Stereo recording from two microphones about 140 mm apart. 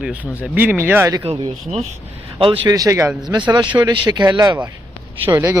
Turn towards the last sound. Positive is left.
turn(degrees=-20)  # may be behind; listen again after turning